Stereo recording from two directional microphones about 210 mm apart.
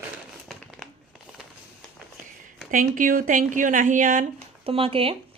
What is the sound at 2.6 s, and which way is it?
A woman's voice, 40° right (ahead or behind).